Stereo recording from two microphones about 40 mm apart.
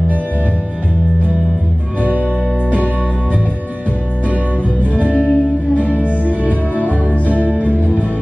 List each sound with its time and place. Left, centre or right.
5.0 s music: right
5.8 s music: left
7.2 s music: right
7.6 s music: left